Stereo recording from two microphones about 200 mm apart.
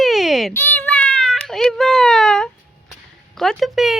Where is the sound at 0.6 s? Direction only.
10° left (ahead or behind).